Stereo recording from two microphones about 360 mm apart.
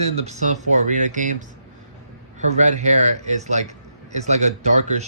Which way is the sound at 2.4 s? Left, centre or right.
Centre.